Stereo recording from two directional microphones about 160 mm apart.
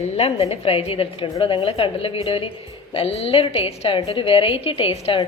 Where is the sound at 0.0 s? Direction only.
40° left (ahead or behind).